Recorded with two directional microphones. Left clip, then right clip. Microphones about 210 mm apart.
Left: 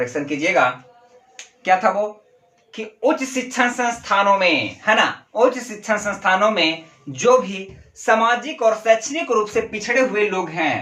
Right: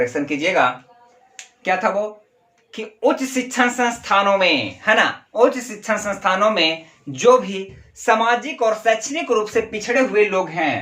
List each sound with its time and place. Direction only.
0.0 s speech: 30° right (ahead or behind)
1.7 s speech: 15° right (ahead or behind)
2.7 s speech: 30° right (ahead or behind)